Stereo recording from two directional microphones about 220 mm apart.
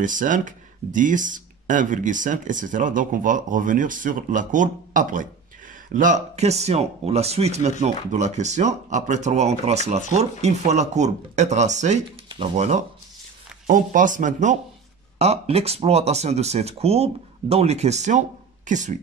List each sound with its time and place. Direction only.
0.0 s speech: 35° right (ahead or behind)